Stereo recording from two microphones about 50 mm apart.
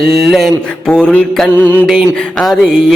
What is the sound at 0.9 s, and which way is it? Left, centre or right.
Music, centre.